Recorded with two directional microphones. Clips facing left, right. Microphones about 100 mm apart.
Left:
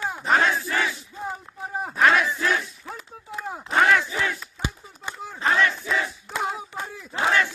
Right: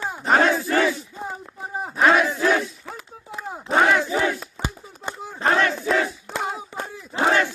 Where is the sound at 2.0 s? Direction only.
20° right (ahead or behind).